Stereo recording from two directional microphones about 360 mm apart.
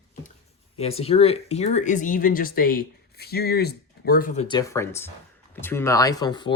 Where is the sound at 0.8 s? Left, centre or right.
Centre.